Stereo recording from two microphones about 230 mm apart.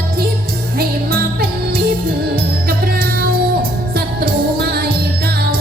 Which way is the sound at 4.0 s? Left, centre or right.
Right.